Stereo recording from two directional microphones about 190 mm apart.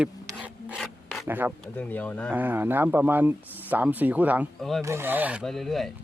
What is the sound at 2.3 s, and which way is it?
Speech, 10° right (ahead or behind).